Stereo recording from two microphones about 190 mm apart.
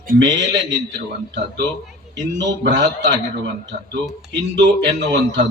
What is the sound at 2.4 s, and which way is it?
Speech, 65° right (ahead or behind).